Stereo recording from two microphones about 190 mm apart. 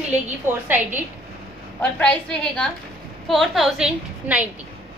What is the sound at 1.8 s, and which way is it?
A woman's voice, 5° left (ahead or behind).